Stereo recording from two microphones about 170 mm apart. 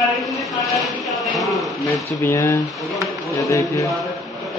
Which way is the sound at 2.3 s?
15° left (ahead or behind).